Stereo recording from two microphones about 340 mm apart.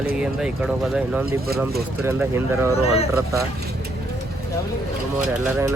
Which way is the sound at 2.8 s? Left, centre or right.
Centre.